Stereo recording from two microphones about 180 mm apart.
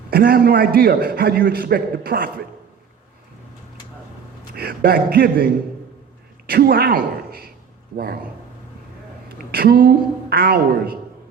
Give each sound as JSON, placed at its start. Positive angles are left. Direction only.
{"t": 0.1, "sound": "a man's voice", "side_deg": -55}
{"t": 4.5, "sound": "a man's voice", "side_deg": -55}
{"t": 9.5, "sound": "a man's voice", "side_deg": -55}